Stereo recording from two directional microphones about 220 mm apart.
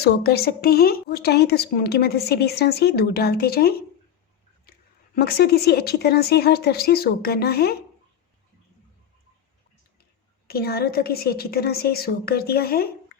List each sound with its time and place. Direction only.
0.0 s a woman's voice: 45° left (ahead or behind)
5.1 s a woman's voice: 45° left (ahead or behind)
10.0 s a woman's voice: 45° left (ahead or behind)